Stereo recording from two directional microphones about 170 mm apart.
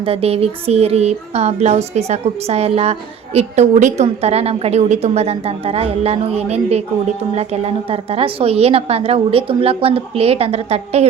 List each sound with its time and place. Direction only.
0.0 s speech: 35° right (ahead or behind)